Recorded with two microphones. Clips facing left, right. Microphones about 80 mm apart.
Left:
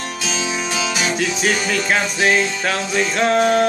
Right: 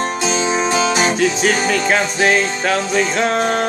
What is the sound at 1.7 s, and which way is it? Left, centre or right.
Music, centre.